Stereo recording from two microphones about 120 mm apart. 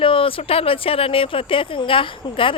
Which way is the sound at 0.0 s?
45° left (ahead or behind).